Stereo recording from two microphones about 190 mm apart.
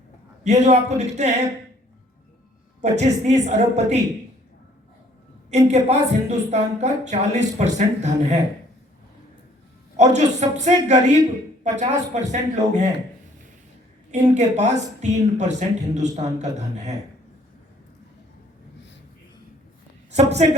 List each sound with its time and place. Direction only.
0.4 s speech: 35° right (ahead or behind)
2.8 s speech: 35° right (ahead or behind)
5.5 s speech: 35° right (ahead or behind)
10.0 s speech: 40° right (ahead or behind)
14.3 s speech: 35° right (ahead or behind)
20.1 s a woman's voice: 35° right (ahead or behind)